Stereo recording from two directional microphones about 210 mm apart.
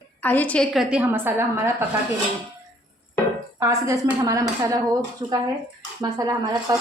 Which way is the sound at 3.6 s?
15° right (ahead or behind).